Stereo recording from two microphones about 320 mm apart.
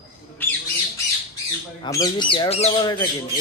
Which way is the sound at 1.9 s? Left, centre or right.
Centre.